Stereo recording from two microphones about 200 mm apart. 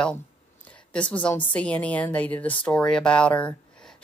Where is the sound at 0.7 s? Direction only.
5° left (ahead or behind).